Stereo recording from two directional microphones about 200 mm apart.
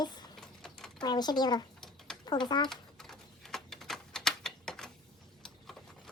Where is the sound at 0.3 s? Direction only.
Centre (ahead or behind).